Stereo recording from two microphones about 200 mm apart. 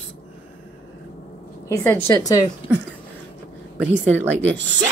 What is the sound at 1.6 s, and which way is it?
Speech, 10° left (ahead or behind).